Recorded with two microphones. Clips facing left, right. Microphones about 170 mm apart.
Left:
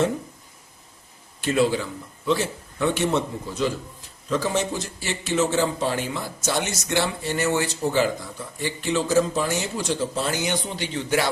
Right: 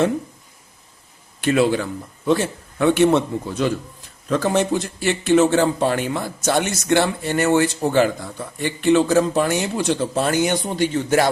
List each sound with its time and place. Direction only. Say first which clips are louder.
1.4 s a man's voice: right 4 dB; 65° right (ahead or behind); by 11.3 s 45° right (ahead or behind)